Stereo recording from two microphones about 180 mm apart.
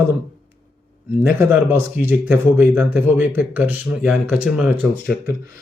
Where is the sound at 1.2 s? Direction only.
10° right (ahead or behind).